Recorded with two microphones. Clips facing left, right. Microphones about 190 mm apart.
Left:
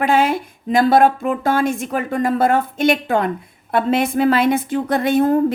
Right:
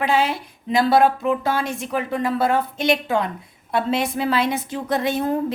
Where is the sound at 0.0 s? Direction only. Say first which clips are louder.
Left 4 dB; 50° left (ahead or behind).